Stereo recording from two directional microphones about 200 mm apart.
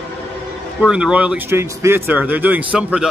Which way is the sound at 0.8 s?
5° right (ahead or behind).